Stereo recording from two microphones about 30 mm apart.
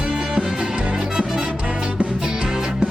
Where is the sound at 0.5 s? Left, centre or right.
Right.